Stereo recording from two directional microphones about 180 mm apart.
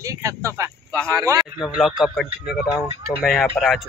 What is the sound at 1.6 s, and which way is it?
A man's voice, 5° right (ahead or behind).